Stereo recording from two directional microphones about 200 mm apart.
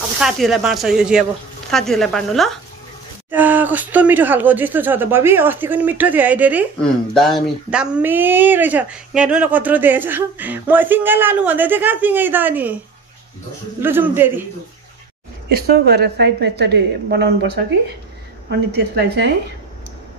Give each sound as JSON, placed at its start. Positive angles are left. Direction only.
{"t": 0.2, "sound": "speech", "side_deg": 0}
{"t": 3.3, "sound": "speech", "side_deg": -10}
{"t": 6.8, "sound": "speech", "side_deg": 0}
{"t": 13.7, "sound": "speech", "side_deg": -10}
{"t": 15.4, "sound": "a woman's voice", "side_deg": -55}